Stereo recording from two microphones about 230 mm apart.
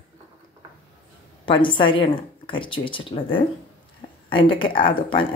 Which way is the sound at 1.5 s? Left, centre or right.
Left.